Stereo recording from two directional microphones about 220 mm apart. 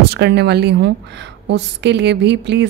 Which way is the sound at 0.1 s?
50° right (ahead or behind).